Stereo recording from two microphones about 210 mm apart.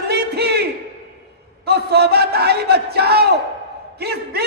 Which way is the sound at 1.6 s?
50° right (ahead or behind).